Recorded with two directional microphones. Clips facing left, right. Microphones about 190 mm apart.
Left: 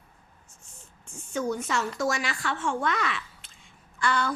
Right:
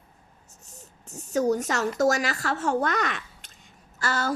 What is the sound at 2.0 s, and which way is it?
A woman's voice, 40° right (ahead or behind).